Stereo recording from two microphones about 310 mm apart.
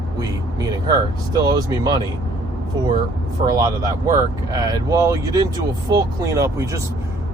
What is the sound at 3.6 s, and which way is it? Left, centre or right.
Speech, centre.